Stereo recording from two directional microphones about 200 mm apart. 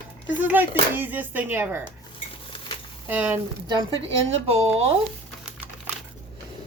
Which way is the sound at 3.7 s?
20° right (ahead or behind).